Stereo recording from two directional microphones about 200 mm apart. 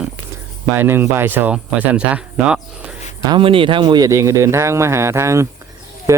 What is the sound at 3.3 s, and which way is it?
A man's voice, 25° right (ahead or behind).